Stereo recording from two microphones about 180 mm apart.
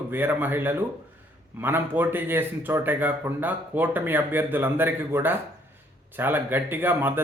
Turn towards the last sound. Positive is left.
turn(degrees=-10)  # may be behind; listen again after turning